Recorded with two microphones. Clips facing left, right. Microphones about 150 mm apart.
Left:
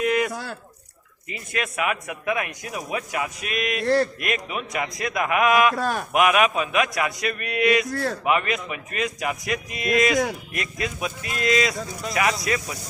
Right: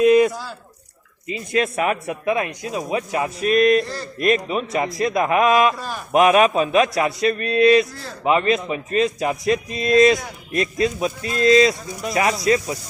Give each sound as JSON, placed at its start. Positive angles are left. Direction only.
{"t": 0.0, "sound": "squish", "side_deg": -20}
{"t": 1.3, "sound": "speech", "side_deg": -30}
{"t": 3.8, "sound": "a sound", "side_deg": 70}
{"t": 4.2, "sound": "a man's voice", "side_deg": -30}
{"t": 5.7, "sound": "speech", "side_deg": 65}
{"t": 6.1, "sound": "a man's voice", "side_deg": -30}
{"t": 7.9, "sound": "a sound", "side_deg": 65}
{"t": 8.2, "sound": "speech", "side_deg": -30}